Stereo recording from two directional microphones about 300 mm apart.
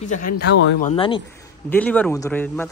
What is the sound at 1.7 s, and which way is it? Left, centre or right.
Speech, centre.